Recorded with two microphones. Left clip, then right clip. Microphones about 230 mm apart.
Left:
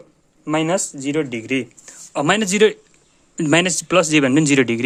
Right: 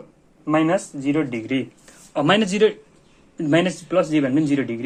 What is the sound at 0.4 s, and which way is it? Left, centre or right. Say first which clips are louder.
Speech: even; left.